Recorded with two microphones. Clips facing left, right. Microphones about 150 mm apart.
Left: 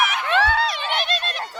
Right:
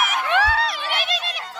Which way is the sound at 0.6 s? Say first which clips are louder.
Left 1 dB; centre (ahead or behind).